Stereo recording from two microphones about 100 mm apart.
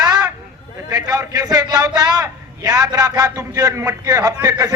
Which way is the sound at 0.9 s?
35° right (ahead or behind).